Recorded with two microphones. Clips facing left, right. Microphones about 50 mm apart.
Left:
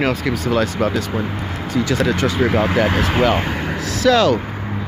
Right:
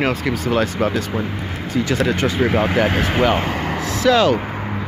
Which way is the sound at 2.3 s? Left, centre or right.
Centre.